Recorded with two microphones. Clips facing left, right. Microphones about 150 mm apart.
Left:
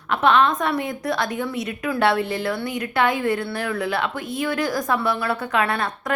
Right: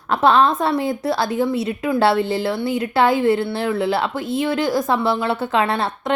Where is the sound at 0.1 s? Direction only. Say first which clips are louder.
Right 3 dB; 35° right (ahead or behind).